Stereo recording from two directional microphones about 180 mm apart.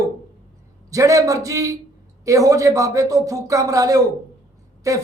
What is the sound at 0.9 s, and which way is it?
Speech, 20° right (ahead or behind).